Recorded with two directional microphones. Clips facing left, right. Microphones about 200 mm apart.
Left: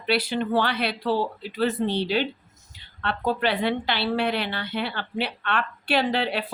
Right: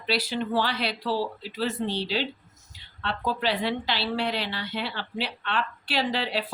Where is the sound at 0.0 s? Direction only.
55° left (ahead or behind).